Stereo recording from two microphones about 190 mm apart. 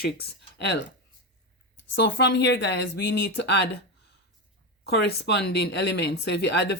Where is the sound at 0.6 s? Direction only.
60° left (ahead or behind).